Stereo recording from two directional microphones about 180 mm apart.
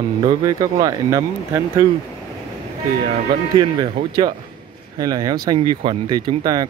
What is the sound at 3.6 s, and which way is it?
Speech, 20° right (ahead or behind).